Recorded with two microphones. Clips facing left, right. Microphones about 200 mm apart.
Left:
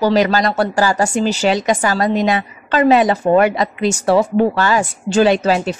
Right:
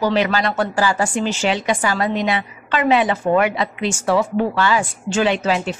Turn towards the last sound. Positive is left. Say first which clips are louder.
# left 5 dB
turn(degrees=40)  # may be behind; listen again after turning